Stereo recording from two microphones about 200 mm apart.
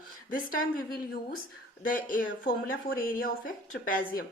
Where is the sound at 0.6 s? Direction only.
45° left (ahead or behind).